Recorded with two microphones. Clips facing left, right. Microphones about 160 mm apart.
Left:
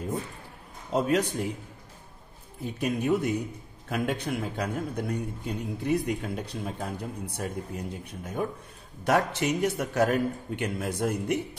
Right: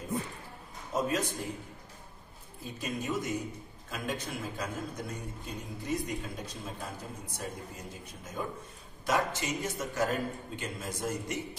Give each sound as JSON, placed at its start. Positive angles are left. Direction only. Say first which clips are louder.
{"t": 0.9, "sound": "a man's voice", "louder": "left 6 dB", "side_deg": 65}
{"t": 2.6, "sound": "a man's voice", "louder": "left 8 dB", "side_deg": 60}